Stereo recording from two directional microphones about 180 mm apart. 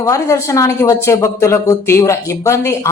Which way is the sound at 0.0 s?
15° left (ahead or behind).